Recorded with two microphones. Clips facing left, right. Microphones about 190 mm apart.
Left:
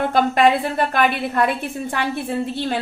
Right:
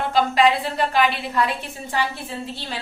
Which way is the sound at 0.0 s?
55° left (ahead or behind).